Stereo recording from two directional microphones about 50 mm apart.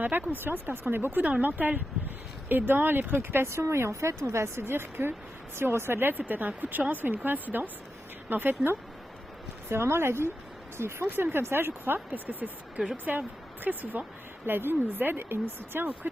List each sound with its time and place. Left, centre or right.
0.0 s speech: right
3.5 s speech: right
9.6 s speech: right
11.1 s speech: right
12.3 s speech: right
14.4 s speech: right